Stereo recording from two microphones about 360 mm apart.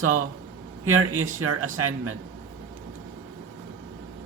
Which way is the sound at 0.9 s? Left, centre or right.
Right.